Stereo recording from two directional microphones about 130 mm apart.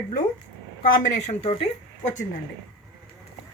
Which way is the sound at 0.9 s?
80° left.